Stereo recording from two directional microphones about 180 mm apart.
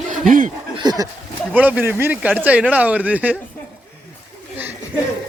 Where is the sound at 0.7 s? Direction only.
20° right (ahead or behind).